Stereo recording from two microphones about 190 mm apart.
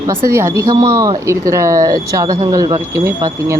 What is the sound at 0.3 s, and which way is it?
Speech, 15° right (ahead or behind).